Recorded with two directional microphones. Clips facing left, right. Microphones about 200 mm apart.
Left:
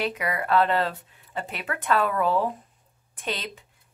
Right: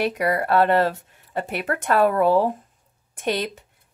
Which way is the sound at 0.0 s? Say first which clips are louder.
Right 6 dB; 40° right (ahead or behind).